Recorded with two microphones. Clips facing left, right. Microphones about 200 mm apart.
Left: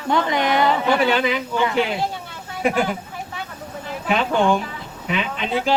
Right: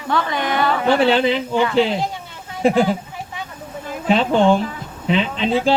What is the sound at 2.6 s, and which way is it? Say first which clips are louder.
Speech: right 5 dB; 30° right (ahead or behind).